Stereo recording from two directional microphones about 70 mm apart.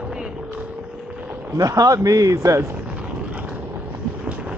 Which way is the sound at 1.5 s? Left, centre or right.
Right.